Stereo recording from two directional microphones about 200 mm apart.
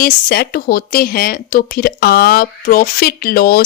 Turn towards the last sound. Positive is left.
turn(degrees=50)  # may be behind; listen again after turning